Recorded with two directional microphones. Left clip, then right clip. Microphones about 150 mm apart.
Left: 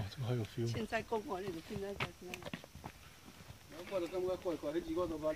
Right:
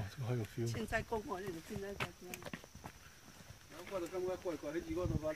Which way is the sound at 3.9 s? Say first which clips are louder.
Left 3 dB; 30° right (ahead or behind).